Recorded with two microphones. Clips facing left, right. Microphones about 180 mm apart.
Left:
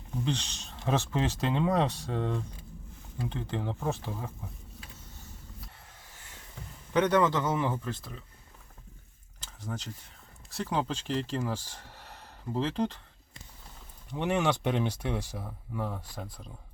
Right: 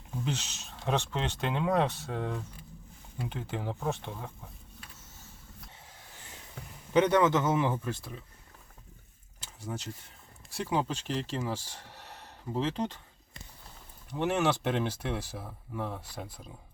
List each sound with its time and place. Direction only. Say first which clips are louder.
0.3 s speech: left 3 dB; 5° right (ahead or behind)
6.9 s speech: right 1 dB; 15° right (ahead or behind)
9.6 s speech: even; 10° right (ahead or behind)
14.2 s speech: even; centre (ahead or behind)